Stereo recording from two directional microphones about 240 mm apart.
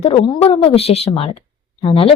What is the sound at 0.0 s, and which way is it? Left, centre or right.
A woman's voice, left.